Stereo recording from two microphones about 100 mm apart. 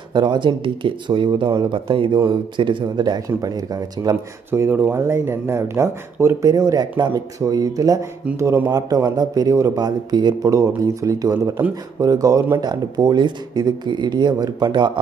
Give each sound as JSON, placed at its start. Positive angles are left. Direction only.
{"t": 0.1, "sound": "speech", "side_deg": -50}
{"t": 3.3, "sound": "speech", "side_deg": -35}
{"t": 4.5, "sound": "speech", "side_deg": -20}
{"t": 4.9, "sound": "speech", "side_deg": -25}